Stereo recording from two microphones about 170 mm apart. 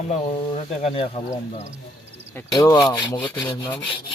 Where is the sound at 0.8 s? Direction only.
35° left (ahead or behind).